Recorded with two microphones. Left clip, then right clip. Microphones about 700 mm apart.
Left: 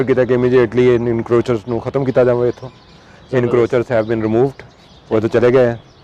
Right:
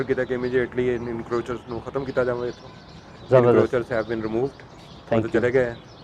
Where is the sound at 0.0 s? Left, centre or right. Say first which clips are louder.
Left 11 dB; left.